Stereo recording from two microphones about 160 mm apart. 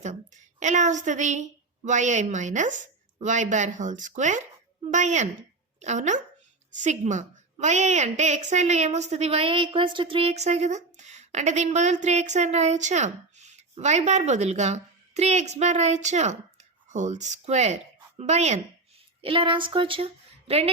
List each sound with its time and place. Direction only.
0.6 s a woman's voice: 50° right (ahead or behind)
19.2 s speech: 35° right (ahead or behind)